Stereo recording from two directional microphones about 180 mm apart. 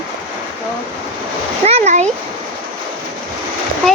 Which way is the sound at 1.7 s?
35° right (ahead or behind).